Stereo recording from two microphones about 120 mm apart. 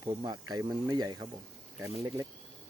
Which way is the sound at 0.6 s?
25° right (ahead or behind).